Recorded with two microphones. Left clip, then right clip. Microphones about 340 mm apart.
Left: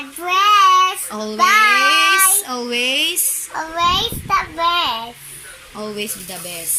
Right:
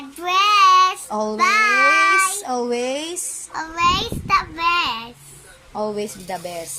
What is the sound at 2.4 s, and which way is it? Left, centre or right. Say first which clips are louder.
Speech: left 1 dB; centre.